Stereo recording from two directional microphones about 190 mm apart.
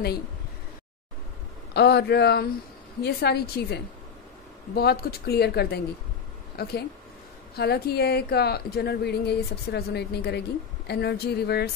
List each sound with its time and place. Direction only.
1.7 s a woman's voice: 60° left (ahead or behind)